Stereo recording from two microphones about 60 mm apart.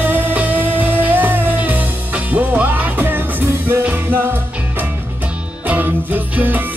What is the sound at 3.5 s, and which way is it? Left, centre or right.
Music, right.